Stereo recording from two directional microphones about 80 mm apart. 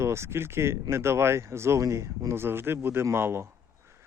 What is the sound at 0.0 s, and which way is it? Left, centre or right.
Speech, right.